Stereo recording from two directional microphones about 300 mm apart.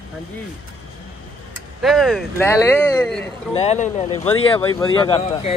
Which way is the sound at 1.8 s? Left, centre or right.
Centre.